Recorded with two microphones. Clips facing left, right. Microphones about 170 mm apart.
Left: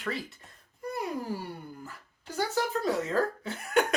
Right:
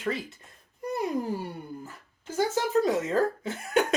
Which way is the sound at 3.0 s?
20° right (ahead or behind).